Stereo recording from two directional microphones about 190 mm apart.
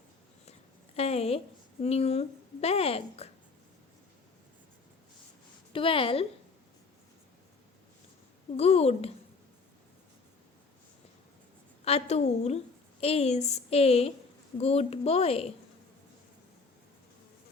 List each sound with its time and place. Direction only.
0.9 s a woman's voice: 35° left (ahead or behind)
5.7 s a woman's voice: 30° left (ahead or behind)
8.5 s a woman's voice: 35° left (ahead or behind)
11.9 s a woman's voice: 35° left (ahead or behind)